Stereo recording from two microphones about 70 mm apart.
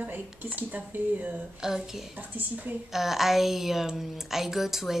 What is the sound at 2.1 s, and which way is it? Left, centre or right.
Speech, right.